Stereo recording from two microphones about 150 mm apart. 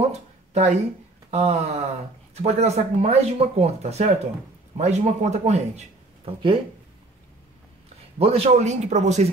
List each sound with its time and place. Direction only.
0.1 s a sound: 50° right (ahead or behind)
1.3 s speech: 45° right (ahead or behind)
6.2 s speech: 35° right (ahead or behind)
8.2 s speech: 40° right (ahead or behind)